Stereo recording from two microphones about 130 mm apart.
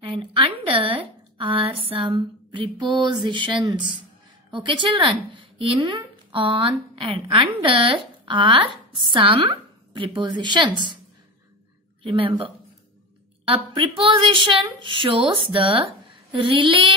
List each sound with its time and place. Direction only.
0.0 s a woman's voice: 45° right (ahead or behind)
12.0 s speech: 40° right (ahead or behind)
13.5 s a woman's voice: 40° right (ahead or behind)